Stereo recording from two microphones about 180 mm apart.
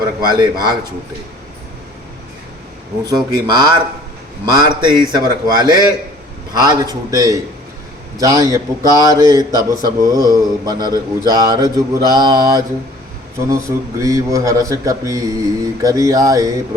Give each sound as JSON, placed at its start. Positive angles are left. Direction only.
{"t": 0.0, "sound": "a man's voice", "side_deg": -25}
{"t": 3.0, "sound": "a man's voice", "side_deg": -25}